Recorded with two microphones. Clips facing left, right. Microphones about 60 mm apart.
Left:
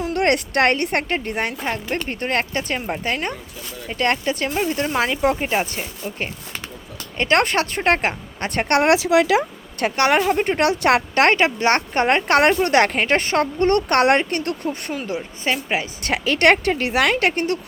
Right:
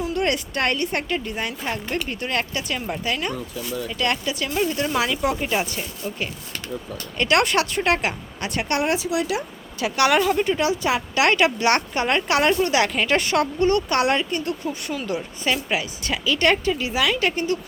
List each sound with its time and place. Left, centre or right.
0.0 s a woman's voice: left
1.6 s a woman's voice: left
4.5 s a woman's voice: left
8.9 s speech: left
9.8 s a woman's voice: left
10.6 s speech: left
11.2 s a woman's voice: left
13.7 s a woman's voice: left
14.9 s a woman's voice: left
16.0 s a woman's voice: left